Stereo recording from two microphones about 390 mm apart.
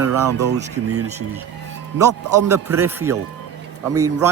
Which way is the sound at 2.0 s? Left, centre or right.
Centre.